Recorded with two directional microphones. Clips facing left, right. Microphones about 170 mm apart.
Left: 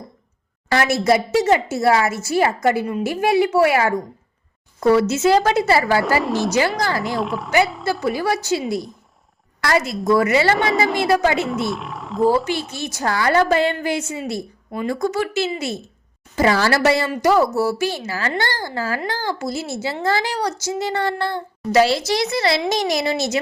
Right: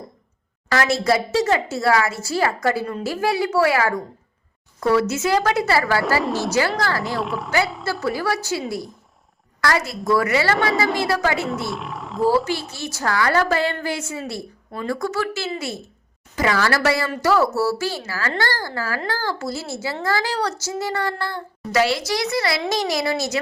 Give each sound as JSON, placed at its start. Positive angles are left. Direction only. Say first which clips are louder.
{"t": 1.0, "sound": "speech", "louder": "left 3 dB", "side_deg": 20}
{"t": 6.2, "sound": "speech", "louder": "left 2 dB", "side_deg": 0}
{"t": 6.5, "sound": "a woman's voice", "louder": "left 1 dB", "side_deg": 20}
{"t": 7.2, "sound": "speech", "louder": "left 2 dB", "side_deg": 0}
{"t": 8.0, "sound": "speech", "louder": "left 1 dB", "side_deg": 20}
{"t": 11.6, "sound": "speech", "louder": "left 3 dB", "side_deg": 0}
{"t": 12.7, "sound": "speech", "louder": "left 1 dB", "side_deg": 20}